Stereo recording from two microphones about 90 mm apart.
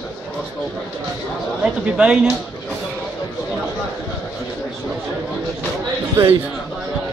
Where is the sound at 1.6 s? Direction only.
10° right (ahead or behind).